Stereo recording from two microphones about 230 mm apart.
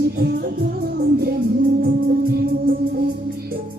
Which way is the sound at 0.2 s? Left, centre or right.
Right.